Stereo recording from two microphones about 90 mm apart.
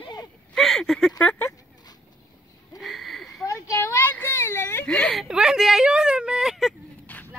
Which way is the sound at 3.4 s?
35° left (ahead or behind).